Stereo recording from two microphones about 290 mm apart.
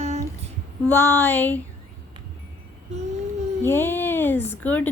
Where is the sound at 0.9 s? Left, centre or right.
Centre.